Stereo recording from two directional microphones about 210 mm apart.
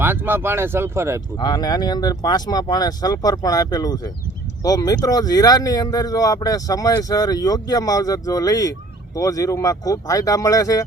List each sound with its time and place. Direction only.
0.0 s speech: 10° right (ahead or behind)
1.4 s speech: 20° left (ahead or behind)